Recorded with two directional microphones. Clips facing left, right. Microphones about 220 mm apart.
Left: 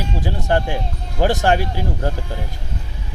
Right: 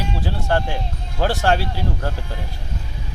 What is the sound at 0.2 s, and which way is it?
Music, 15° left (ahead or behind).